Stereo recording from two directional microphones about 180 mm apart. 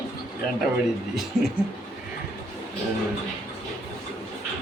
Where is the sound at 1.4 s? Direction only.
5° right (ahead or behind).